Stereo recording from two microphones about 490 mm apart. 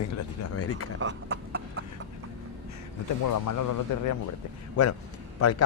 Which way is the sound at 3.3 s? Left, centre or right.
Left.